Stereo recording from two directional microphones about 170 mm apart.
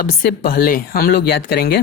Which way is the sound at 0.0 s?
65° left (ahead or behind).